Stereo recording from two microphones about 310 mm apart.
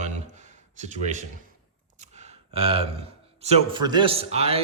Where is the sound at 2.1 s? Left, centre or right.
Centre.